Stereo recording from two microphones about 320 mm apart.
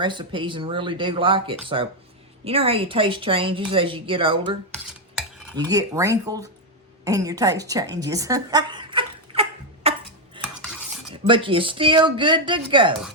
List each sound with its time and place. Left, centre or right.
0.0 s a woman's voice: centre
5.5 s a woman's voice: centre
7.0 s a sound: centre
10.4 s cutlery: centre
11.3 s a woman's voice: centre